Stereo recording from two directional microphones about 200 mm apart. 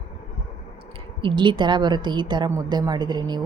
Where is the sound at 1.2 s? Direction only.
25° right (ahead or behind).